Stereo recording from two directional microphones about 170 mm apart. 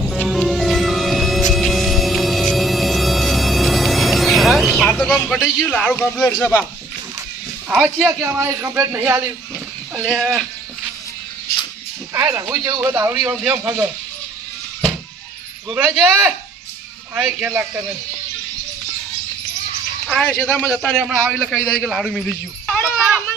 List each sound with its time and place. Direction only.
0.0 s music: centre (ahead or behind)
6.4 s speech: 10° left (ahead or behind)
7.7 s a man's voice: centre (ahead or behind)
8.0 s speech: 15° right (ahead or behind)
9.9 s a man's voice: centre (ahead or behind)
12.1 s speech: 15° right (ahead or behind)
15.7 s speech: 5° right (ahead or behind)
20.1 s a man's voice: 5° left (ahead or behind)